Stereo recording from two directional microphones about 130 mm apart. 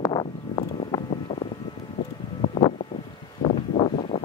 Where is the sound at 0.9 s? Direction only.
30° left (ahead or behind).